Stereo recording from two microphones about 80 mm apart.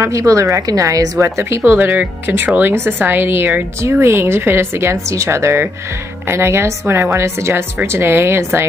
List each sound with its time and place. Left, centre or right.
0.0 s speech: right